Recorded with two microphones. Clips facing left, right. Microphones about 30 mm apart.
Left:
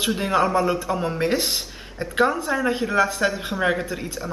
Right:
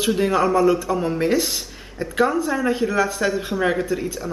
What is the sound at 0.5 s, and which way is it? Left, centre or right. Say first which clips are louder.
Speech: right 4 dB; left.